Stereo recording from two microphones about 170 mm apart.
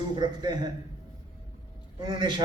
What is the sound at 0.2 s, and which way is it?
Speech, 25° right (ahead or behind).